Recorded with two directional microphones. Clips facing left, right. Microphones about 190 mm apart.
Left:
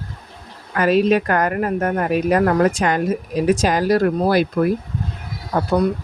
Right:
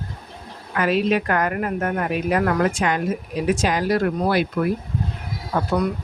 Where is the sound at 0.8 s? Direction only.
40° left (ahead or behind).